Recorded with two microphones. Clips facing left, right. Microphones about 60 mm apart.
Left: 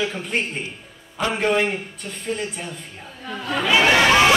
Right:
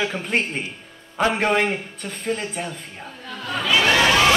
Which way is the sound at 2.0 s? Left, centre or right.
Right.